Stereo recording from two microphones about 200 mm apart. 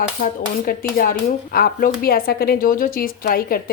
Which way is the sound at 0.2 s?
45° left (ahead or behind).